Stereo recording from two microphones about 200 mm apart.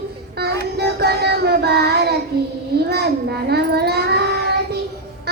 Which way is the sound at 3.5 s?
55° right (ahead or behind).